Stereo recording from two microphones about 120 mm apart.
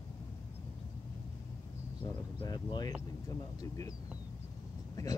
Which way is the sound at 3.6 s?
30° left (ahead or behind).